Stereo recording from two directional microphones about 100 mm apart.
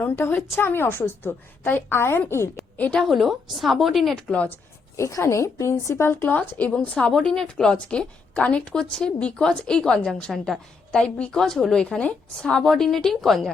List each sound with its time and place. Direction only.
0.0 s a woman's voice: 20° left (ahead or behind)
2.7 s a woman's voice: 15° left (ahead or behind)
3.0 s speech: centre (ahead or behind)
4.3 s a woman's voice: 10° left (ahead or behind)
4.9 s a woman's voice: 30° left (ahead or behind); by 13.5 s centre (ahead or behind)